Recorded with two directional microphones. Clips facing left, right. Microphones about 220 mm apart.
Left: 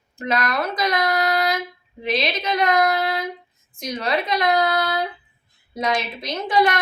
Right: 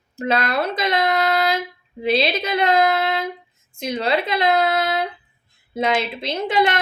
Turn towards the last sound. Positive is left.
turn(degrees=-25)  # may be behind; listen again after turning